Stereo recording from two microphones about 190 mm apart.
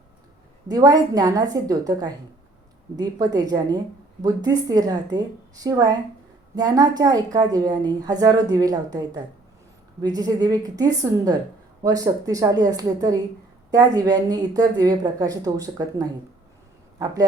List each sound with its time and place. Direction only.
0.7 s a woman's voice: 20° right (ahead or behind)